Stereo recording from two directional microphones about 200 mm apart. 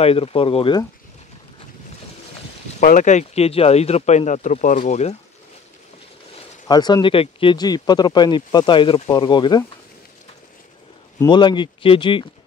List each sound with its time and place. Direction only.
0.0 s speech: 30° left (ahead or behind)
2.8 s speech: 40° left (ahead or behind)
6.7 s speech: 20° left (ahead or behind)
11.1 s speech: 20° left (ahead or behind)